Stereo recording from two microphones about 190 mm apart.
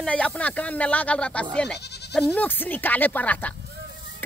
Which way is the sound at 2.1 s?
5° left (ahead or behind).